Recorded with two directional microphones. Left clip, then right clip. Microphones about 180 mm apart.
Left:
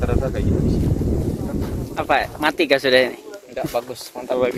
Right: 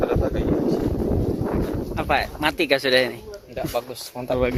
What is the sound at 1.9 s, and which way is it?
Speech, 10° left (ahead or behind).